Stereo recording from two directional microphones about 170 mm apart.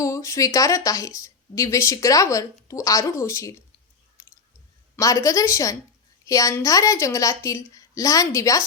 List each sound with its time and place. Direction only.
0.0 s speech: 20° left (ahead or behind)
4.2 s chewing: 15° left (ahead or behind)
4.9 s speech: 20° left (ahead or behind)